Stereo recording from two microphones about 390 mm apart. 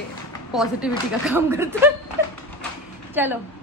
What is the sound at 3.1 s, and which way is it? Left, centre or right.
Speech, centre.